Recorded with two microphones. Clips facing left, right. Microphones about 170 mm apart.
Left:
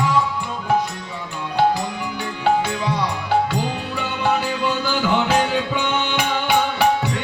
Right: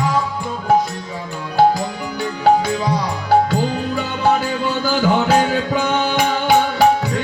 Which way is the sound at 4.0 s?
40° right (ahead or behind).